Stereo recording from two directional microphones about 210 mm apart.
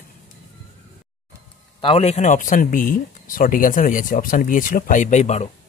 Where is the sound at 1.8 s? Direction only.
30° left (ahead or behind).